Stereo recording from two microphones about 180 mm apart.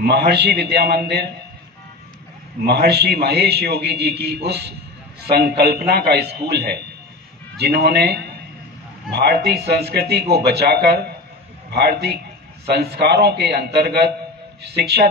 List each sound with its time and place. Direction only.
0.0 s a man's voice: 65° right (ahead or behind)
2.6 s a man's voice: 65° right (ahead or behind)